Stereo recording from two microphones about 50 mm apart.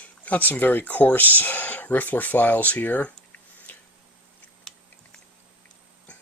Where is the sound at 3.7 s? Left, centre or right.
Left.